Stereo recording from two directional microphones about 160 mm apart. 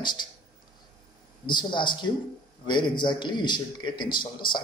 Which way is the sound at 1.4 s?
30° left (ahead or behind).